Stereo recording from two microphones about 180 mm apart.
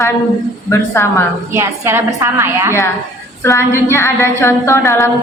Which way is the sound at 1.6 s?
15° right (ahead or behind).